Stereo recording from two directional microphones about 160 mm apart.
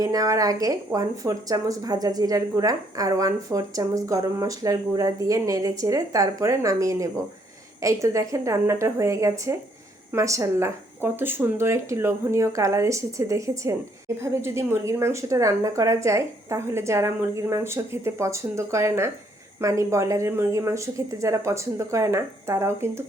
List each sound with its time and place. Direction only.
0.0 s a woman's voice: 20° right (ahead or behind)